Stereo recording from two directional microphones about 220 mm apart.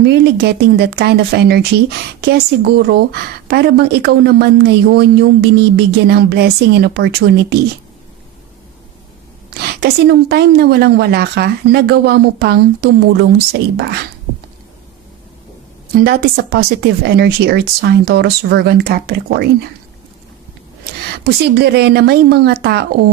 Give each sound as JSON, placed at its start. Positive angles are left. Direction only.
{"t": 0.0, "sound": "speech", "side_deg": -50}
{"t": 9.6, "sound": "speech", "side_deg": -45}
{"t": 16.0, "sound": "speech", "side_deg": -45}
{"t": 21.2, "sound": "speech", "side_deg": -50}